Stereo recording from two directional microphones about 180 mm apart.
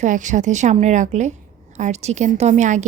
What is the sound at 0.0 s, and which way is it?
Speech, 45° right (ahead or behind).